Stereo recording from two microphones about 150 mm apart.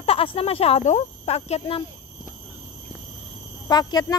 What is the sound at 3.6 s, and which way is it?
Speech, 30° left (ahead or behind).